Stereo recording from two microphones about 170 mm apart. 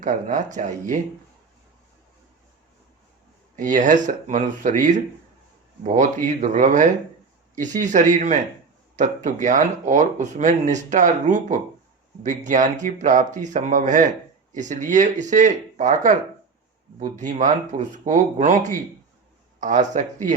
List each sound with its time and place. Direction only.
0.0 s speech: 50° right (ahead or behind)
3.5 s speech: 50° right (ahead or behind)